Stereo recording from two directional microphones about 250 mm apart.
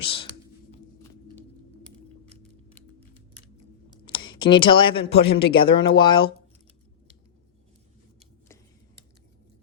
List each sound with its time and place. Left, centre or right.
0.0 s speech: left
4.0 s speech: centre